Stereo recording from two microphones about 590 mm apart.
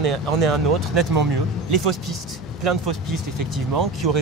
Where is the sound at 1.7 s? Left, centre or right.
Right.